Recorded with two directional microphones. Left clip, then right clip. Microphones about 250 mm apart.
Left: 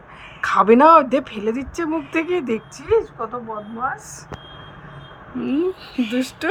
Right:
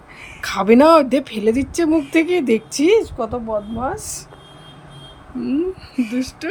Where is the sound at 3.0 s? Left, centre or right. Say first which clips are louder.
Right 4 dB; centre.